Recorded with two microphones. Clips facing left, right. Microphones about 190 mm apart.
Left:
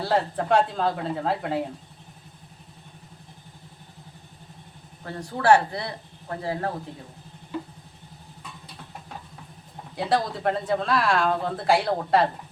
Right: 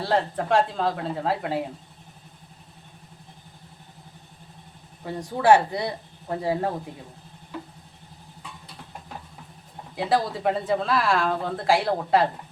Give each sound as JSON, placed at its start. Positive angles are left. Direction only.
{"t": 0.0, "sound": "speech", "side_deg": 0}
{"t": 5.0, "sound": "speech", "side_deg": -15}
{"t": 9.9, "sound": "speech", "side_deg": 0}